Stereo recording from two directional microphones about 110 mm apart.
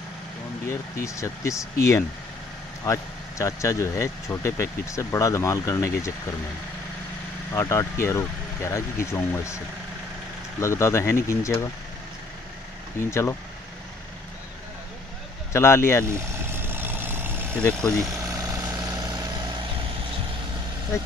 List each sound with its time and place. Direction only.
0.7 s speech: 30° left (ahead or behind)
7.5 s speech: 25° left (ahead or behind)
10.6 s speech: 25° left (ahead or behind)
13.1 s speech: 25° left (ahead or behind)
15.5 s speech: 25° left (ahead or behind)
16.1 s vehicle: 25° right (ahead or behind)
17.6 s speech: 10° left (ahead or behind)
18.2 s vehicle: 30° right (ahead or behind)
20.9 s speech: 25° left (ahead or behind)